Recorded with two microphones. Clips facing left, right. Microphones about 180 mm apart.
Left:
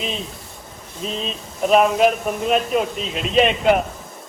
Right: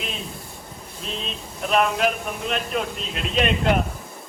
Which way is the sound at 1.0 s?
Centre (ahead or behind).